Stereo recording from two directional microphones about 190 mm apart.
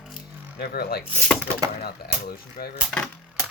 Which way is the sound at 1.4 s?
20° right (ahead or behind).